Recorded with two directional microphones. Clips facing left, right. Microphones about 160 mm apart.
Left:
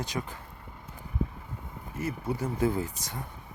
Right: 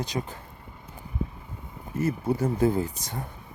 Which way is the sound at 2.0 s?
40° right (ahead or behind).